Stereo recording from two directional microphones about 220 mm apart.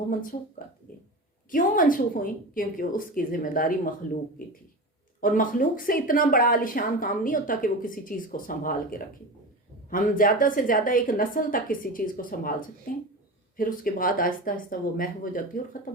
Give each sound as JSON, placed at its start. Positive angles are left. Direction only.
{"t": 0.1, "sound": "speech", "side_deg": 40}
{"t": 1.5, "sound": "speech", "side_deg": 40}
{"t": 5.2, "sound": "speech", "side_deg": 40}